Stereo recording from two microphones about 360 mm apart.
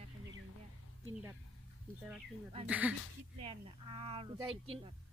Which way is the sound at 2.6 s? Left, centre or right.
Centre.